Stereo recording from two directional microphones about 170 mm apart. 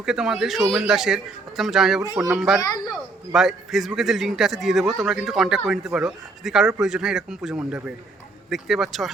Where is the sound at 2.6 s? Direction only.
20° left (ahead or behind).